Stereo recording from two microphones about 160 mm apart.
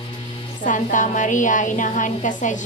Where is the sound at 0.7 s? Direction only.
50° left (ahead or behind).